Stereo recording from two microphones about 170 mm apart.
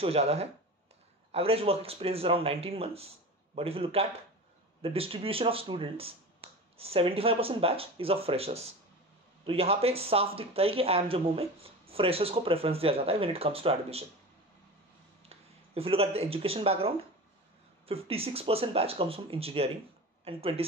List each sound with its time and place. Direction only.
0.0 s speech: 35° right (ahead or behind)
15.2 s speech: 35° right (ahead or behind)